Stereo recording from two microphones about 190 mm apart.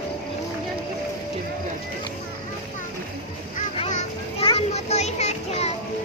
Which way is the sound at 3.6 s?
40° left (ahead or behind).